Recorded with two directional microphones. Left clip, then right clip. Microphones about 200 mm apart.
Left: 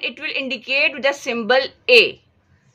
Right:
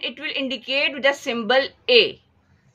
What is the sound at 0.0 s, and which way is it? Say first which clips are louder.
A woman's voice: left 2 dB; 15° left (ahead or behind).